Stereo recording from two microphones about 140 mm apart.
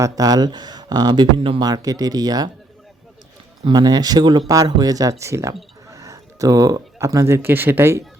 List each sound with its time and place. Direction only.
0.0 s speech: 25° right (ahead or behind)
3.6 s speech: 30° right (ahead or behind)